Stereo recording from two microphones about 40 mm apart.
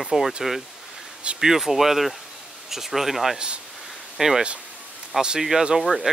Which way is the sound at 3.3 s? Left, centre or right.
Right.